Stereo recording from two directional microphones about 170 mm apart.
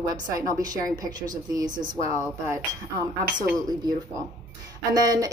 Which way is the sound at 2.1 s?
15° right (ahead or behind).